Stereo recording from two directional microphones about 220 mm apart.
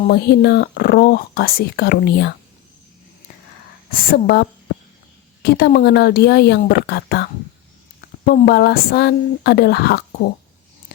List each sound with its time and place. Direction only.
0.1 s speech: 45° left (ahead or behind)
4.1 s speech: 45° left (ahead or behind)